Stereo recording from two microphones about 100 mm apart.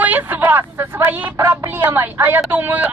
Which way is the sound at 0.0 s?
15° right (ahead or behind).